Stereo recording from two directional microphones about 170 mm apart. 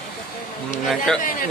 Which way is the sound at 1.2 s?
55° left (ahead or behind).